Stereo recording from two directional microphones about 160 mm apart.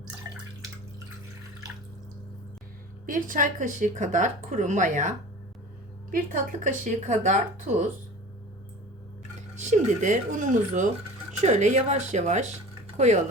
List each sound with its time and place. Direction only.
3.1 s speech: 55° right (ahead or behind)
9.6 s speech: 50° right (ahead or behind)